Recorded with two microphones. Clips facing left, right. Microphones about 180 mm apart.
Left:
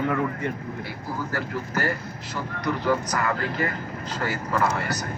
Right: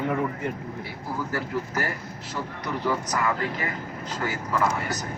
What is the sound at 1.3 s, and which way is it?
Speech, 65° left (ahead or behind).